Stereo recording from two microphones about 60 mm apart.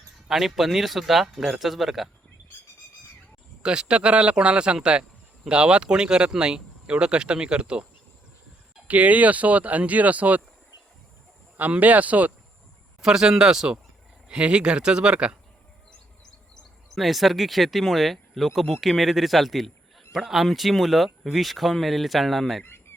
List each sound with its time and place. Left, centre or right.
0.3 s speech: centre
3.6 s speech: centre
8.9 s speech: right
11.5 s speech: right
13.0 s speech: centre
16.9 s speech: centre
22.6 s chicken: left